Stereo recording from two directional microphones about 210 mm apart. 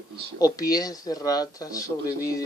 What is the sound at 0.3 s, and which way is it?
Speech, 15° left (ahead or behind).